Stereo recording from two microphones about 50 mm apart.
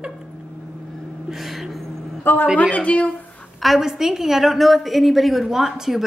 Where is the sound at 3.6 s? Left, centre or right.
Centre.